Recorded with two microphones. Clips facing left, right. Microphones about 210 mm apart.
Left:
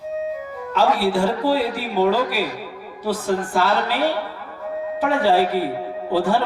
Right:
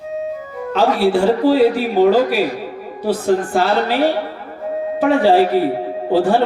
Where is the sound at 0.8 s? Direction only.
25° right (ahead or behind).